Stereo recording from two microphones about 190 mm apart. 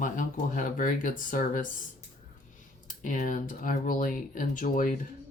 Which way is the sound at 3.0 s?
40° left (ahead or behind).